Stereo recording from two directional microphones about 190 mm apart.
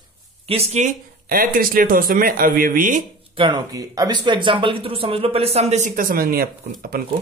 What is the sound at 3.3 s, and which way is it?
Speech, 25° right (ahead or behind).